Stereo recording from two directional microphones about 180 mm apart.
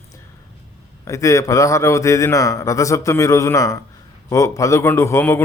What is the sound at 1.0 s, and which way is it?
A man's voice, 15° left (ahead or behind).